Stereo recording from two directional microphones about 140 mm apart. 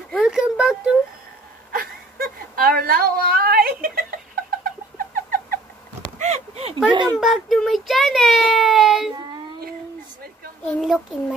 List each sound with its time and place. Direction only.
0.2 s a sound: 5° right (ahead or behind)
1.7 s whimper: 90° right
4.9 s rodents: 90° right
6.1 s a sound: 50° right (ahead or behind)
6.9 s speech: 35° right (ahead or behind)
7.2 s a child's voice: centre (ahead or behind)
10.8 s a child's voice: 5° right (ahead or behind)